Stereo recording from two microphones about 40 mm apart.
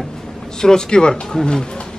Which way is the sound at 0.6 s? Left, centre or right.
Centre.